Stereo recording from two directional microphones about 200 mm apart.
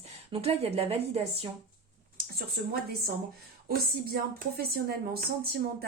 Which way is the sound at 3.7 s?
50° right (ahead or behind).